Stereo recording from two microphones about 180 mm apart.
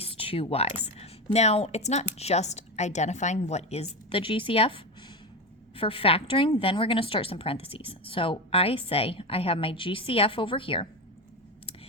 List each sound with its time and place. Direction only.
0.0 s a woman's voice: 30° left (ahead or behind)